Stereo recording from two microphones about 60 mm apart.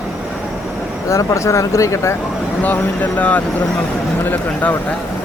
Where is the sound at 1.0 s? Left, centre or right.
Left.